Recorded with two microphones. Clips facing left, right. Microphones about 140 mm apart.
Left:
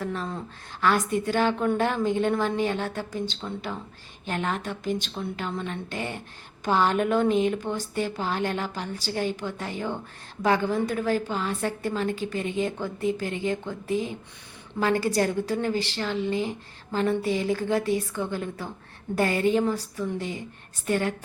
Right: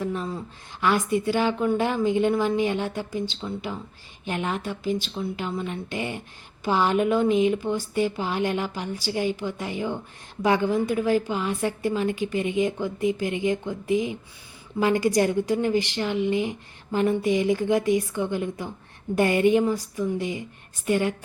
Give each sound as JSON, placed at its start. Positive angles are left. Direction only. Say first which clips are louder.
{"t": 0.0, "sound": "a sound", "louder": "right 2 dB", "side_deg": -10}
{"t": 1.1, "sound": "a woman's voice", "louder": "right 1 dB", "side_deg": -10}
{"t": 1.8, "sound": "a woman's voice", "louder": "right 2 dB", "side_deg": -10}